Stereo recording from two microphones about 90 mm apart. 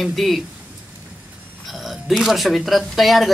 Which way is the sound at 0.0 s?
Centre (ahead or behind).